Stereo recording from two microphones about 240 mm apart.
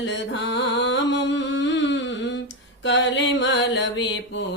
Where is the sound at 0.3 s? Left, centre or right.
Left.